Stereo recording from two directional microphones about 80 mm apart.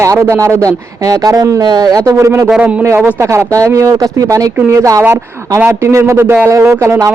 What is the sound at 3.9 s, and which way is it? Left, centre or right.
A man's voice, right.